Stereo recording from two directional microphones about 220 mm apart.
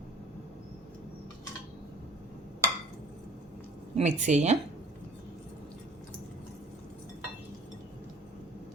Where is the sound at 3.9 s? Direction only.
35° right (ahead or behind).